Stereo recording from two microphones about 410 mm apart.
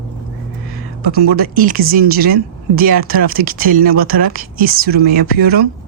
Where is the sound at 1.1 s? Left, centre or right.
Right.